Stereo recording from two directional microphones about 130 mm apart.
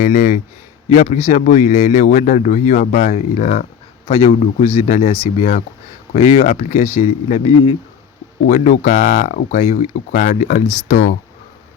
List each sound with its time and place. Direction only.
0.0 s speech: 85° left
0.9 s a man's voice: 55° left (ahead or behind)
4.2 s speech: 55° left (ahead or behind)
6.1 s speech: 55° left (ahead or behind)
8.4 s a man's voice: 85° left